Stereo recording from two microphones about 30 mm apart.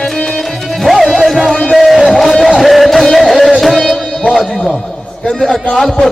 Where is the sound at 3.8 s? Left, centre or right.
Centre.